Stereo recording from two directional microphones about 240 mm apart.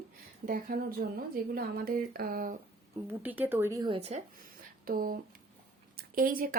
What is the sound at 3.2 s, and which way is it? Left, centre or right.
Speech, centre.